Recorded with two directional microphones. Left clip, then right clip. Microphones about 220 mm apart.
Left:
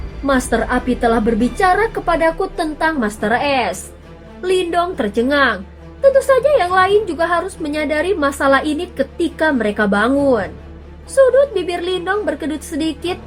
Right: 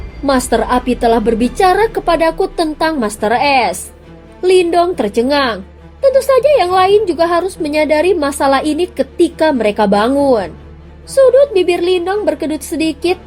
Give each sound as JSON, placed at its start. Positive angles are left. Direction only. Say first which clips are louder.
{"t": 0.3, "sound": "a woman's voice", "louder": "right 4 dB", "side_deg": -30}